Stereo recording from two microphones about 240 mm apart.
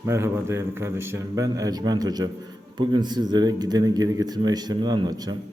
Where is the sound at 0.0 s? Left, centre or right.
Centre.